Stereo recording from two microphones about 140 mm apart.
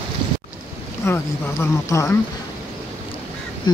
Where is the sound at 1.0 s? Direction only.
20° left (ahead or behind).